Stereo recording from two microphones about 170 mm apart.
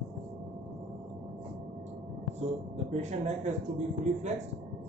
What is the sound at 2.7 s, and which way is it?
Speech, 45° right (ahead or behind).